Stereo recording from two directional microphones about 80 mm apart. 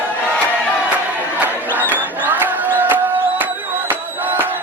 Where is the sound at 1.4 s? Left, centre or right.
Right.